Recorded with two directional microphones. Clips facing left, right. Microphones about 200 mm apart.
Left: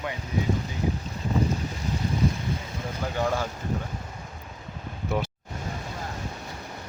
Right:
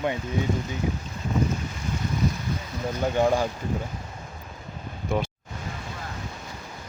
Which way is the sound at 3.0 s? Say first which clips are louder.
Right 5 dB; 20° right (ahead or behind).